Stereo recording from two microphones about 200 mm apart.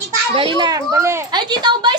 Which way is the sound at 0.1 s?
25° right (ahead or behind).